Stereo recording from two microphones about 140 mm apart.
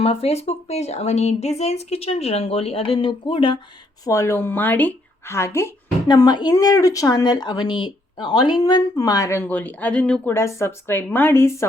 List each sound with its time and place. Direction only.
0.0 s speech: 45° left (ahead or behind)
4.0 s speech: 20° left (ahead or behind)
6.1 s a woman's voice: 30° left (ahead or behind); by 10.3 s 10° left (ahead or behind)
10.3 s speech: 20° left (ahead or behind)